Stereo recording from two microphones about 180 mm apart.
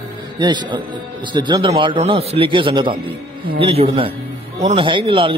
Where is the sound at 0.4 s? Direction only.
25° right (ahead or behind).